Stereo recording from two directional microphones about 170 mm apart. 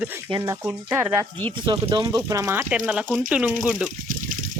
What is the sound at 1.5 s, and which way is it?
Speech, 30° right (ahead or behind).